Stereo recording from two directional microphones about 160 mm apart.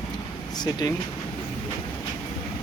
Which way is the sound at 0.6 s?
25° left (ahead or behind).